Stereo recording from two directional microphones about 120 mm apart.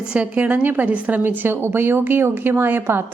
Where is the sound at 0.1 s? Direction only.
10° right (ahead or behind).